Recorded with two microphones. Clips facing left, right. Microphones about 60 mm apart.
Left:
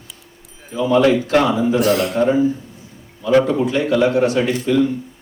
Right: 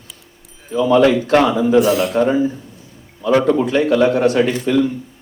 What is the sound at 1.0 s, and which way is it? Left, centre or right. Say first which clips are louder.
Speech: right 2 dB; right.